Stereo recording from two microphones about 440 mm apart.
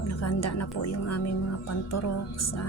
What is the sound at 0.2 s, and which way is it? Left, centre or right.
Speech, left.